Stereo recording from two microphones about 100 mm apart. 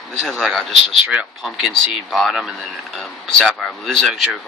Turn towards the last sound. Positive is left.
turn(degrees=0)  # may be behind; listen again after turning